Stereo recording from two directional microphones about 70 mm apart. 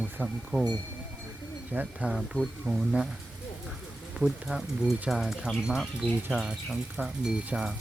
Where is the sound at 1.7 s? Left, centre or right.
Right.